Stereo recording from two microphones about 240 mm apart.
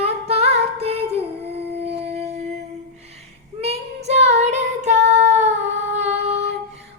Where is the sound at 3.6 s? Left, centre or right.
Right.